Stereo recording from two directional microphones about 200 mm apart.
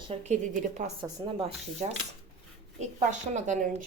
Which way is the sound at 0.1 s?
35° right (ahead or behind).